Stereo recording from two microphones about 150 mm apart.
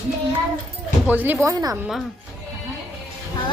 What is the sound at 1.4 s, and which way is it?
Speech, 25° right (ahead or behind).